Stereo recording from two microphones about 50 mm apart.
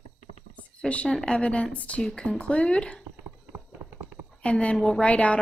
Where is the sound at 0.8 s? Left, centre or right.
Centre.